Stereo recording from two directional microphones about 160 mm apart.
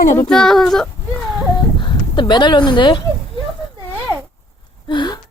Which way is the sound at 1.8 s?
30° left (ahead or behind).